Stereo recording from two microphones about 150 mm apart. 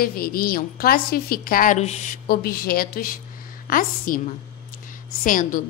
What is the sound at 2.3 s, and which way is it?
A woman's voice, 85° left.